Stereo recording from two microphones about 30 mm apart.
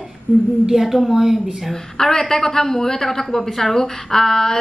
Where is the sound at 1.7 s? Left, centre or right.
Left.